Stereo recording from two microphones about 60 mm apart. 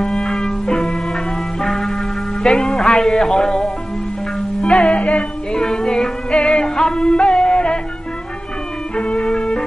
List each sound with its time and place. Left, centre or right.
0.0 s music: centre
2.4 s speech: centre
5.5 s music: centre
8.9 s music: centre